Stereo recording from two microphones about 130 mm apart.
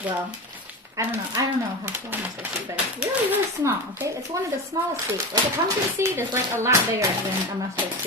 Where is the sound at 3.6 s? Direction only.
20° right (ahead or behind).